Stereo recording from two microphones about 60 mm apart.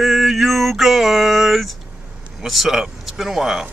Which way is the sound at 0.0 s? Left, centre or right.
Centre.